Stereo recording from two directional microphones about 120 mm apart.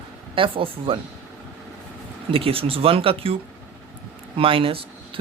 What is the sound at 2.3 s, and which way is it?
Speech, 50° right (ahead or behind).